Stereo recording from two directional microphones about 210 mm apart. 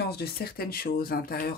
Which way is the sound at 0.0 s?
50° left (ahead or behind).